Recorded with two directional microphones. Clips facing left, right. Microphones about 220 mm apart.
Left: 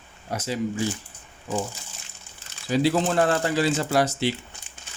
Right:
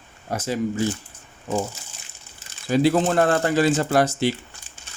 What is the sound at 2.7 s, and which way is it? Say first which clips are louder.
Speech: right 3 dB; 50° right (ahead or behind).